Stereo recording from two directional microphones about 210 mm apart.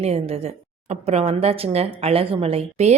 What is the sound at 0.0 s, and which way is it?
A woman's voice, 30° right (ahead or behind).